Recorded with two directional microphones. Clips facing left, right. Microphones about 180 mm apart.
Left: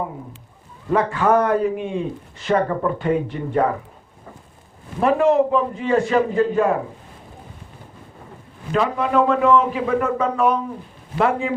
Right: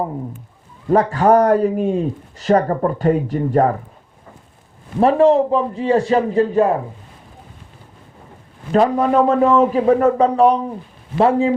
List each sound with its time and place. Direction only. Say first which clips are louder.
0.9 s speech: right 4 dB; 40° right (ahead or behind)
4.9 s speech: right 4 dB; 35° right (ahead or behind)
8.7 s speech: right 5 dB; 40° right (ahead or behind)